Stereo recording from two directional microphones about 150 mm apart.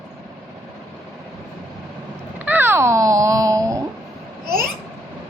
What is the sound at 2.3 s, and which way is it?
A child's voice, 10° right (ahead or behind).